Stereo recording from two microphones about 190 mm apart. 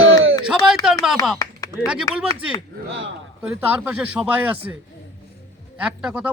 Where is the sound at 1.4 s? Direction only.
15° left (ahead or behind).